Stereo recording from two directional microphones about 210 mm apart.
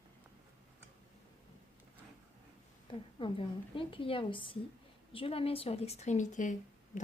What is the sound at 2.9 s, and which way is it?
A woman's voice, 25° left (ahead or behind).